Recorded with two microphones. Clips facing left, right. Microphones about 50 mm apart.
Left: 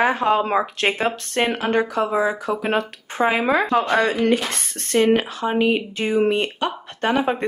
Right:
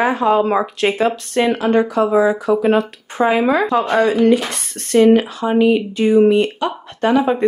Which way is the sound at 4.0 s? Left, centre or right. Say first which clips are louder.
Right 5 dB; left.